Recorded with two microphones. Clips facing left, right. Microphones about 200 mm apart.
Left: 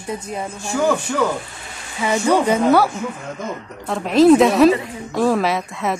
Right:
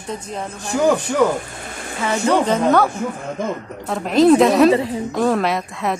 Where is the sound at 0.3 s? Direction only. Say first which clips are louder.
Left 1 dB; 10° left (ahead or behind).